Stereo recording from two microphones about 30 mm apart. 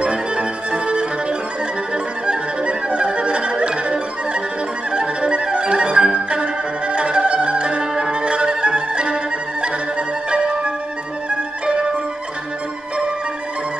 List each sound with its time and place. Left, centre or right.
0.0 s music: right
2.2 s music: right